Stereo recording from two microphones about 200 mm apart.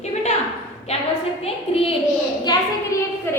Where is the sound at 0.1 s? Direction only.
35° left (ahead or behind).